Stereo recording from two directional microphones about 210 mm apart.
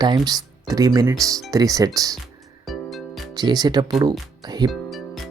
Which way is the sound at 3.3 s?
20° right (ahead or behind).